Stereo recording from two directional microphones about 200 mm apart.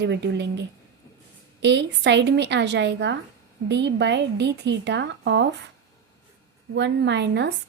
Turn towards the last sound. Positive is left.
turn(degrees=-60)  # may be behind; listen again after turning